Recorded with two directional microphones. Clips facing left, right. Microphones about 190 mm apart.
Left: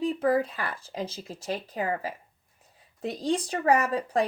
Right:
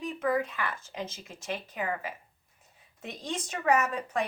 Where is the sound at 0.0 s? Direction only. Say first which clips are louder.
Left 5 dB; 35° left (ahead or behind).